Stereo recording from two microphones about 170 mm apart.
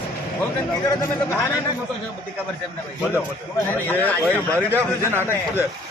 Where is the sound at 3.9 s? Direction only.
10° left (ahead or behind).